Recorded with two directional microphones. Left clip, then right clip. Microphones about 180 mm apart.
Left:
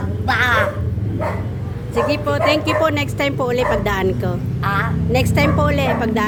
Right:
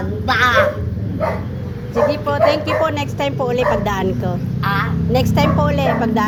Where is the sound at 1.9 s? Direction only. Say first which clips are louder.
Right 2 dB; 15° left (ahead or behind).